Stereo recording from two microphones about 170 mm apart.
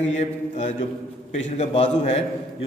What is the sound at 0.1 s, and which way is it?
A man's voice, 40° left (ahead or behind).